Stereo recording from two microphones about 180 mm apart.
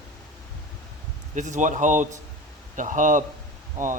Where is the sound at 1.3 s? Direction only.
45° right (ahead or behind).